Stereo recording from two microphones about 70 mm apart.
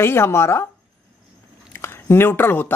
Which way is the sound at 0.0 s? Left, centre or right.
Left.